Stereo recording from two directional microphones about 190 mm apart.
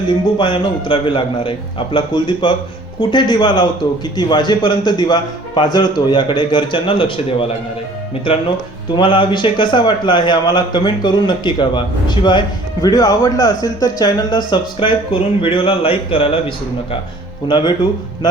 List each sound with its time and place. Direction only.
0.3 s a man's voice: 25° left (ahead or behind)
9.0 s a man's voice: 25° left (ahead or behind)
17.5 s a man's voice: 25° left (ahead or behind)